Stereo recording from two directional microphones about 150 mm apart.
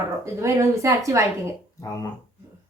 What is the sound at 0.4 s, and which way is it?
Speech, 20° right (ahead or behind).